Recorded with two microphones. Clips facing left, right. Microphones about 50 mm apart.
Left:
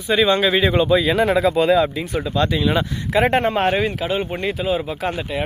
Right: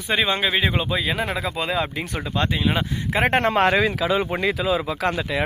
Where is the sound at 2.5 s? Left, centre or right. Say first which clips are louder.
Left 3 dB; centre.